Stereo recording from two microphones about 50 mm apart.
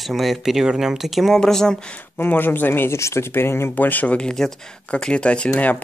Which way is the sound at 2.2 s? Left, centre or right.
Left.